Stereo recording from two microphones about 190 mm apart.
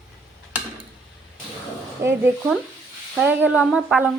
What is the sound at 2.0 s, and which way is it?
Speech, 15° right (ahead or behind).